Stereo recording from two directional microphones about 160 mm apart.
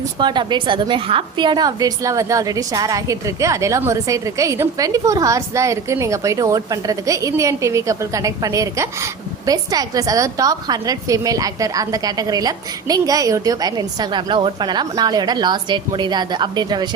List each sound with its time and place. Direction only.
0.2 s a woman's voice: 30° right (ahead or behind)